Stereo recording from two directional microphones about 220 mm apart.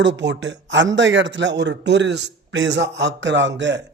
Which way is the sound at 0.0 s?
50° right (ahead or behind).